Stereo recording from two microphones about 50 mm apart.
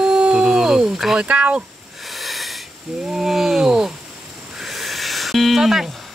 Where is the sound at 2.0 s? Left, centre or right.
Centre.